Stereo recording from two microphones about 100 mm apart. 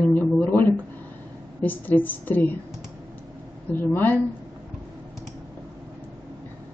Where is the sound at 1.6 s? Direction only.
15° left (ahead or behind).